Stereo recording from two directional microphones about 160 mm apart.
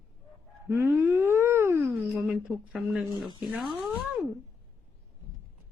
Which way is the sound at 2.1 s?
5° right (ahead or behind).